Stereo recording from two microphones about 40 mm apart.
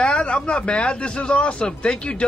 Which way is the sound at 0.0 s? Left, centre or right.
Left.